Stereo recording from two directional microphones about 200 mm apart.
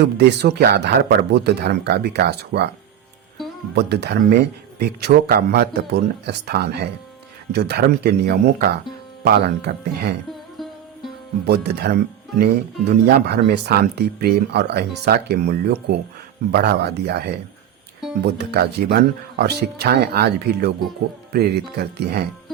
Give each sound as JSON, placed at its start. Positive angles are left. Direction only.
{"t": 0.0, "sound": "speech", "side_deg": -55}
{"t": 3.4, "sound": "music", "side_deg": 0}
{"t": 3.8, "sound": "speech", "side_deg": -55}
{"t": 10.6, "sound": "music", "side_deg": 0}
{"t": 11.4, "sound": "speech", "side_deg": -55}